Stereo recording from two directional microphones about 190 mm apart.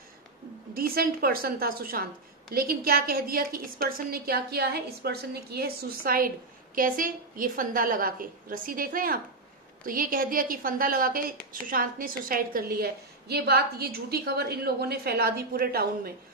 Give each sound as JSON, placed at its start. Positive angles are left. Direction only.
{"t": 0.7, "sound": "a woman's voice", "side_deg": -50}